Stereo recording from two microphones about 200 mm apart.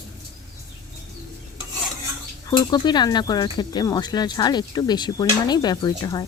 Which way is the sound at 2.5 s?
20° left (ahead or behind).